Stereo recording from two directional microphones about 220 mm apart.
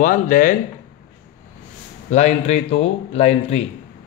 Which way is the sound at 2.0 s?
30° left (ahead or behind).